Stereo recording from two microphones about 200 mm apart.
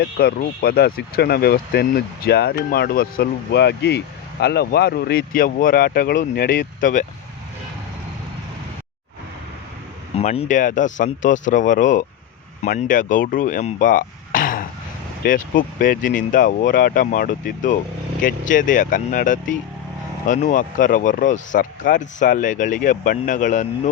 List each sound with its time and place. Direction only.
0.0 s speech: 50° left (ahead or behind)
10.2 s speech: 35° left (ahead or behind)